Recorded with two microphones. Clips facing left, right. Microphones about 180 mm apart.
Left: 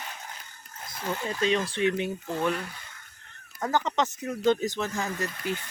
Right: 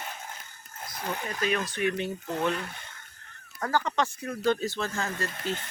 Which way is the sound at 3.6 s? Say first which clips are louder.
Left 1 dB; 20° left (ahead or behind).